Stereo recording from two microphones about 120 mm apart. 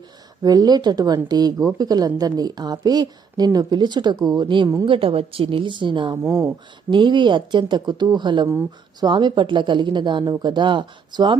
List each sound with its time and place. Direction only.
0.4 s a woman's voice: 35° right (ahead or behind)
6.2 s speech: 20° right (ahead or behind)
6.9 s a woman's voice: 40° right (ahead or behind)